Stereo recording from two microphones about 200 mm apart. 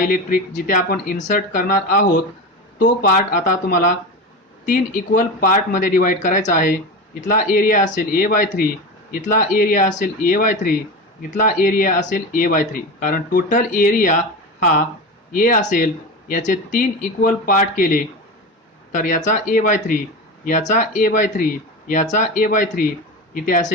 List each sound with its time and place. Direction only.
0.1 s speech: 45° left (ahead or behind)